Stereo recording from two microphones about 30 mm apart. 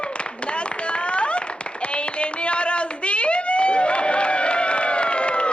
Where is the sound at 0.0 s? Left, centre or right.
Left.